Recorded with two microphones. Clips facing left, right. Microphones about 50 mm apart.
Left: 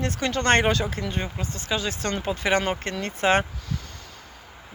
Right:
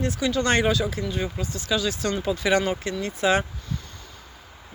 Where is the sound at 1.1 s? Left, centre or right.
Left.